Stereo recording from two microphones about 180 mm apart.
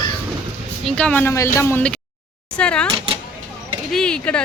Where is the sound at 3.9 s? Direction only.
5° left (ahead or behind).